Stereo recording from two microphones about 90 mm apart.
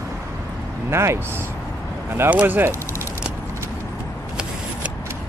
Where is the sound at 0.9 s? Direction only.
30° right (ahead or behind).